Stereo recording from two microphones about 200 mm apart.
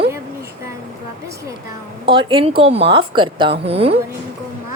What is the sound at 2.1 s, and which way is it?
A woman's voice, 25° right (ahead or behind).